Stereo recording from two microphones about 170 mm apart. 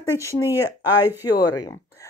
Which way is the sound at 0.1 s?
20° left (ahead or behind).